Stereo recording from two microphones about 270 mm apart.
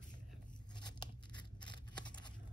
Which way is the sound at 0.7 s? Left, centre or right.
Centre.